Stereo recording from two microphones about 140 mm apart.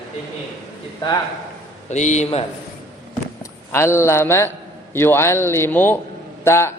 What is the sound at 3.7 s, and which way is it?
A man's voice, 20° left (ahead or behind).